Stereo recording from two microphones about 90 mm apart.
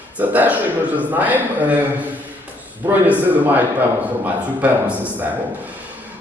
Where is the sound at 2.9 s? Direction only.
20° right (ahead or behind).